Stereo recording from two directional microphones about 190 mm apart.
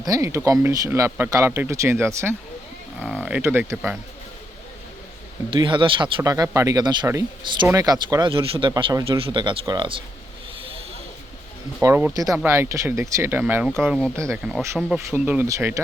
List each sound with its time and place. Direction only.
0.0 s speech: 15° right (ahead or behind)
3.0 s speech: 5° left (ahead or behind)
3.3 s speech: 10° right (ahead or behind)
5.5 s a man's voice: 25° right (ahead or behind)
11.8 s speech: 15° right (ahead or behind)
14.2 s speech: 15° right (ahead or behind)
14.8 s speech: centre (ahead or behind)